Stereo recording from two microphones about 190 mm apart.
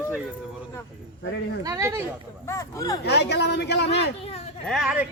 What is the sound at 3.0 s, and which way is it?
Speech, 60° left (ahead or behind).